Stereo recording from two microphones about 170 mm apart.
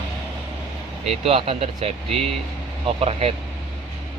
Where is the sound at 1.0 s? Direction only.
35° right (ahead or behind).